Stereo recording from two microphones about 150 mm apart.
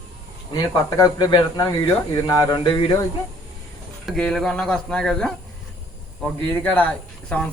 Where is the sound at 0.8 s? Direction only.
25° left (ahead or behind).